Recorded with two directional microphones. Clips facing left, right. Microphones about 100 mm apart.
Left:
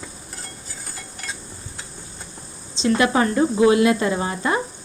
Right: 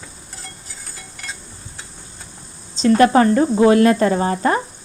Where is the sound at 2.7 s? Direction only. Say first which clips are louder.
Right 6 dB; 40° right (ahead or behind).